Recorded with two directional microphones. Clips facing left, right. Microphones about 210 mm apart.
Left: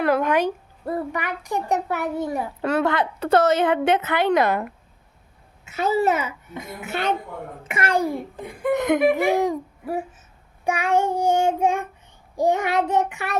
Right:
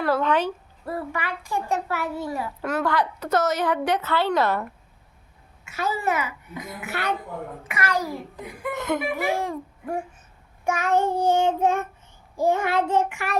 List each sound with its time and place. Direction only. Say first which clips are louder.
0.0 s child singing: left 2 dB; 15° left (ahead or behind)
0.9 s a child's voice: left 3 dB; 20° left (ahead or behind)
8.7 s child singing: left 8 dB; 20° left (ahead or behind)
10.6 s child singing: left 1 dB; 15° left (ahead or behind)
12.4 s a child's voice: left 1 dB; 15° left (ahead or behind)